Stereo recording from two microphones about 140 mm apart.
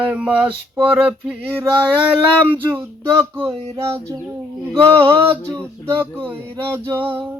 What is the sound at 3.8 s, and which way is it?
Child singing, 20° right (ahead or behind).